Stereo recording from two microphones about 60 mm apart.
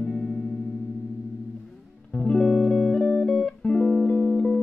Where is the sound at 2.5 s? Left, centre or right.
Centre; by 4.6 s left.